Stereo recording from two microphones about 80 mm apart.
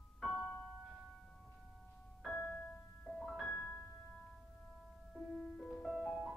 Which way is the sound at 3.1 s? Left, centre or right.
Centre.